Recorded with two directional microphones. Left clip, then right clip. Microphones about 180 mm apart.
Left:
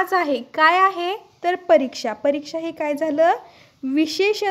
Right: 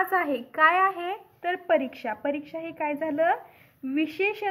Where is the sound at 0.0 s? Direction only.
45° left (ahead or behind).